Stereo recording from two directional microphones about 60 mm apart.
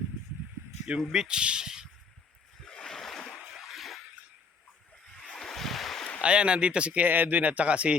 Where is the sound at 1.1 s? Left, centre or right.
Centre.